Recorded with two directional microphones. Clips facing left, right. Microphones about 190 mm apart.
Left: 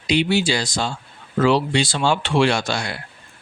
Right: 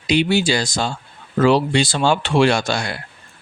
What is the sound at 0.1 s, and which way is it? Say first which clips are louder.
Speech: right 2 dB; 45° right (ahead or behind).